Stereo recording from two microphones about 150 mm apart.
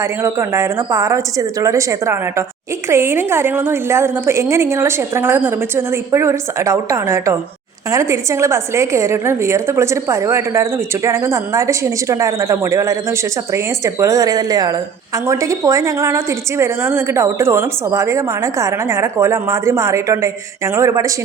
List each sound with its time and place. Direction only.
0.0 s a woman's voice: 20° right (ahead or behind)